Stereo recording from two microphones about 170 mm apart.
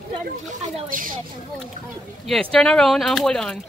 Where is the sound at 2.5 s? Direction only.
5° left (ahead or behind).